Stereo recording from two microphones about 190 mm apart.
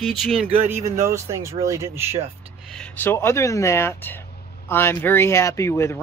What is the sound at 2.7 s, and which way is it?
Speech, 10° left (ahead or behind).